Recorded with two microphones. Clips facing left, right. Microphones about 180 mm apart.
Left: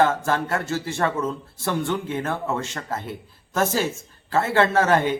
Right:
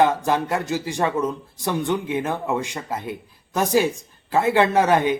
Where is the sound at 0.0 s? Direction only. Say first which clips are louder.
Right 2 dB; 15° right (ahead or behind).